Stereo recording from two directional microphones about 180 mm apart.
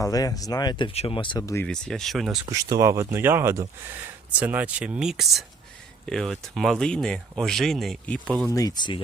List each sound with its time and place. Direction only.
0.0 s speech: 20° left (ahead or behind)
1.6 s speech: 5° left (ahead or behind)
2.5 s speech: 20° right (ahead or behind); by 8.4 s 5° left (ahead or behind)
8.4 s speech: 20° left (ahead or behind)